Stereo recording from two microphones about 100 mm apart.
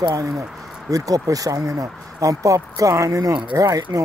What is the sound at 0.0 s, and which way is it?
Speech, 35° right (ahead or behind).